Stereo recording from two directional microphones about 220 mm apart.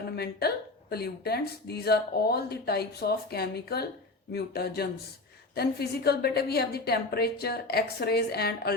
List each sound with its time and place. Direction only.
0.2 s speech: 45° left (ahead or behind)